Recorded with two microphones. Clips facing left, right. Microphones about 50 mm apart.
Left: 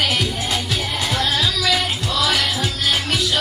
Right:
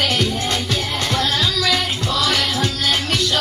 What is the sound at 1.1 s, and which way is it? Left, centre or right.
Music, centre.